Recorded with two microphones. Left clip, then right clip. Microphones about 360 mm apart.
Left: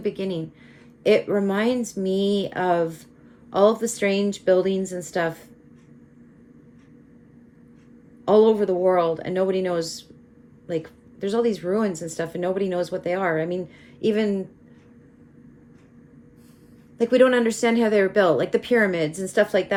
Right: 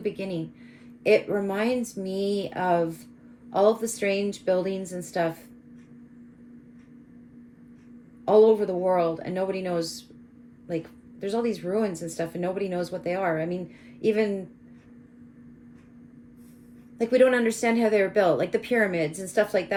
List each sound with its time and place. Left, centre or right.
0.0 s speech: centre
8.2 s speech: left
17.2 s speech: centre